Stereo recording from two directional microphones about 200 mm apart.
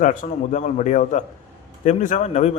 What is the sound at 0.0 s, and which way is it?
A man's voice, 40° left (ahead or behind).